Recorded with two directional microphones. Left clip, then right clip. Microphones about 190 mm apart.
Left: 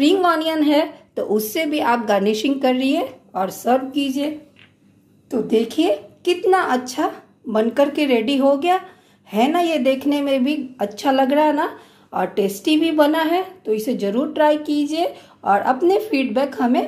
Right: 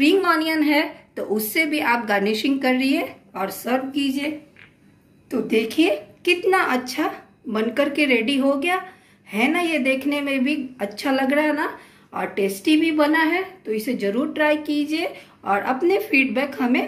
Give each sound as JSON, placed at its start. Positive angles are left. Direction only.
{"t": 0.0, "sound": "a woman's voice", "side_deg": 40}
{"t": 5.3, "sound": "a woman's voice", "side_deg": 40}